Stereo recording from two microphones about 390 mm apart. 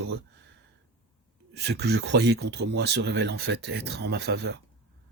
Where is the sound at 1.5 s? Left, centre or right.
Right.